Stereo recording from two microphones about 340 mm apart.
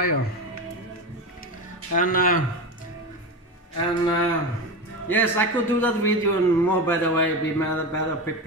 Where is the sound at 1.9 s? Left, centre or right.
Left.